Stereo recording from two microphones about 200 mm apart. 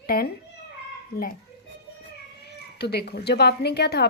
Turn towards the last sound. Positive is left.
turn(degrees=55)  # may be behind; listen again after turning